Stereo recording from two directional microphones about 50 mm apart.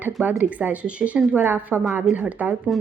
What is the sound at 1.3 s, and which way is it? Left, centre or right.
Speech, right.